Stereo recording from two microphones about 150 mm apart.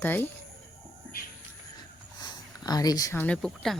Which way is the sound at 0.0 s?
15° left (ahead or behind).